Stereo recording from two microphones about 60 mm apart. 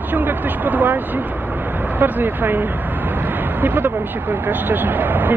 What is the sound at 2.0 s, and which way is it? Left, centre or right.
Speech, right.